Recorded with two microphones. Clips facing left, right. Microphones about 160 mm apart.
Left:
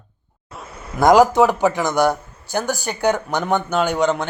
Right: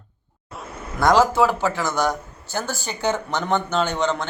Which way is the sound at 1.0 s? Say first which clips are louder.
Left 4 dB; 15° left (ahead or behind).